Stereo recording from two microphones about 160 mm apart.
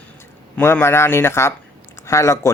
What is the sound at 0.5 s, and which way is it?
A man's voice, 15° left (ahead or behind).